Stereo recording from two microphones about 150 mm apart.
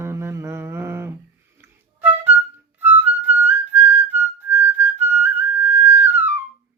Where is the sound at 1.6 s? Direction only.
15° right (ahead or behind).